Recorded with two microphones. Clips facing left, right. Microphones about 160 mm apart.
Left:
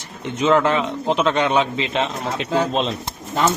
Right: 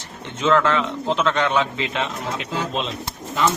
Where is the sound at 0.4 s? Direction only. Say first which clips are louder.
Left 2 dB; 15° left (ahead or behind).